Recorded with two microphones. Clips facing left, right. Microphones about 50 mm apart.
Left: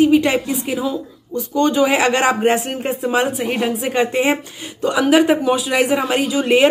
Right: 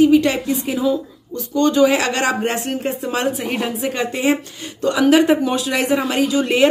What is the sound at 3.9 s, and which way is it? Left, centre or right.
Speech, left.